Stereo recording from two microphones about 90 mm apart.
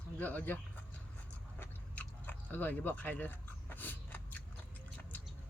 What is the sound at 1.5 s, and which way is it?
Chewing, 20° left (ahead or behind).